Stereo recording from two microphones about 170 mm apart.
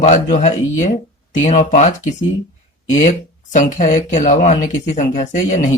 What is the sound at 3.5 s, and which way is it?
Speech, 45° left (ahead or behind).